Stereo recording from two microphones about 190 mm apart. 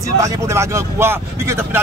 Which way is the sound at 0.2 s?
15° right (ahead or behind).